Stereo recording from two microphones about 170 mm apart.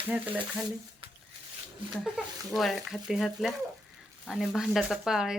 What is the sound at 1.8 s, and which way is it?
Speech, 30° right (ahead or behind).